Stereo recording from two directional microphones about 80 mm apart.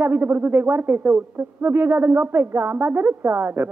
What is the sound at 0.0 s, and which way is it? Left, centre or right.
Speech, right.